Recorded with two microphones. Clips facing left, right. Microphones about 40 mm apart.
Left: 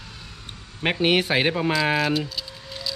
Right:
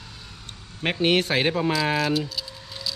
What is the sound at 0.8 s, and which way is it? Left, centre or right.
Speech, centre.